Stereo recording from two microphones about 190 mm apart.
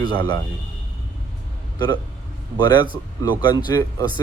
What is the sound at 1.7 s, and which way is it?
Speech, 20° left (ahead or behind).